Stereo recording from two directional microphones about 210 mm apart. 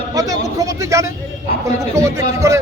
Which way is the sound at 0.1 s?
15° right (ahead or behind).